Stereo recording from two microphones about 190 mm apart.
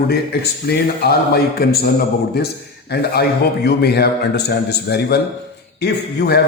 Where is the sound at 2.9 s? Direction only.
55° left (ahead or behind).